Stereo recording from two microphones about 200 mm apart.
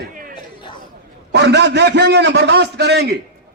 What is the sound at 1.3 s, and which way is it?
A man's voice, 60° right (ahead or behind).